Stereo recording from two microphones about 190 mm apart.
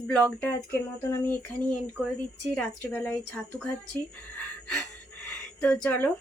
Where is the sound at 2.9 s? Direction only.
5° left (ahead or behind).